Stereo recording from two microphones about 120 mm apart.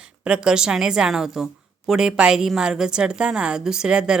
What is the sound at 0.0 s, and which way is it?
A woman's voice, 5° right (ahead or behind).